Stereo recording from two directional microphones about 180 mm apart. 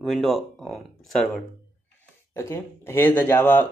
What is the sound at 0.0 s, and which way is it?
Speech, centre (ahead or behind).